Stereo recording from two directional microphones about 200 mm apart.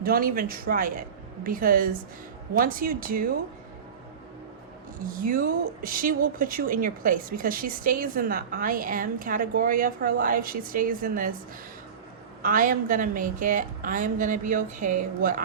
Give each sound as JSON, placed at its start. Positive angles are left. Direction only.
{"t": 0.0, "sound": "speech", "side_deg": -45}
{"t": 5.0, "sound": "speech", "side_deg": -45}
{"t": 12.4, "sound": "a woman's voice", "side_deg": -45}